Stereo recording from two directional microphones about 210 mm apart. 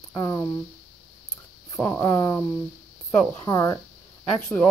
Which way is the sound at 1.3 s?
15° left (ahead or behind).